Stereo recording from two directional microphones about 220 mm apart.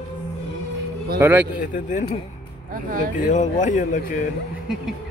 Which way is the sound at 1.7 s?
35° left (ahead or behind).